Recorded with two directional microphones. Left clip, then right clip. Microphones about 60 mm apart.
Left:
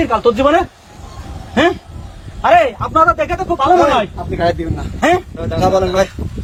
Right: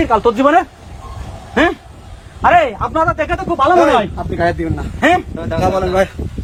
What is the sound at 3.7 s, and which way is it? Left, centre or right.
Speech, right.